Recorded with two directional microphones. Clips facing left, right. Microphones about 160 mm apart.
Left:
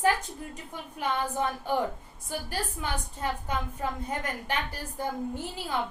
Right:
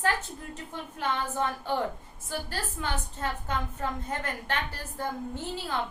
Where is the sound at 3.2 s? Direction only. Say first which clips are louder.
Left 3 dB; 10° left (ahead or behind).